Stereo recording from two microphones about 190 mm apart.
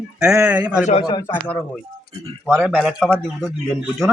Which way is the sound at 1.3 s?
5° left (ahead or behind).